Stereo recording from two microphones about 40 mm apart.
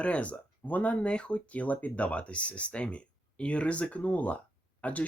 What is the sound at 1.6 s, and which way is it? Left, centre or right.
Speech, left.